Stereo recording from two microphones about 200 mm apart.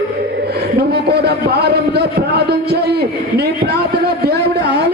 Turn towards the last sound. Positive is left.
turn(degrees=-55)  # may be behind; listen again after turning